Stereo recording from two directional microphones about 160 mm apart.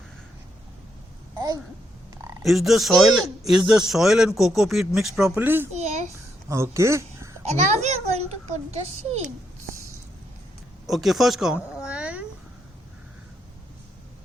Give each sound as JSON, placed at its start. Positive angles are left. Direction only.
{"t": 2.4, "sound": "speech", "side_deg": 0}
{"t": 5.3, "sound": "a child's voice", "side_deg": -15}
{"t": 6.1, "sound": "a sound", "side_deg": -15}
{"t": 7.4, "sound": "a child's voice", "side_deg": -45}
{"t": 10.8, "sound": "speech", "side_deg": 0}